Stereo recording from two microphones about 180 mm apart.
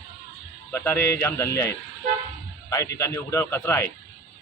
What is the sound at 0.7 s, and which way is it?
A man's voice, 10° left (ahead or behind).